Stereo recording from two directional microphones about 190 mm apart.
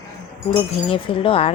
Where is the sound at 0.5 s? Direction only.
25° left (ahead or behind).